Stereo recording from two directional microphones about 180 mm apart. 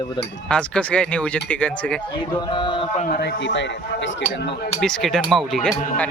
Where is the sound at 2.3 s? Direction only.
25° left (ahead or behind).